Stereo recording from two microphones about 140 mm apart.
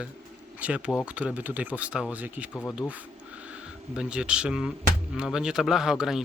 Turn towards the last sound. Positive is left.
turn(degrees=-5)  # may be behind; listen again after turning